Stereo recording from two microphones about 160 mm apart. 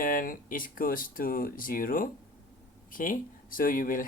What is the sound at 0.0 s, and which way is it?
Speech, 60° left (ahead or behind).